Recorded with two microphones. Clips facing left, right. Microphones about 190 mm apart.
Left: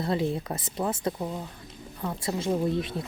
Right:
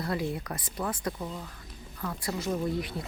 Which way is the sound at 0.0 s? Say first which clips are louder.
Left 4 dB; 25° left (ahead or behind).